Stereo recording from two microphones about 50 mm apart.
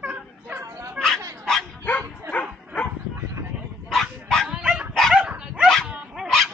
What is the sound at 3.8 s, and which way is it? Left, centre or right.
Dog, centre.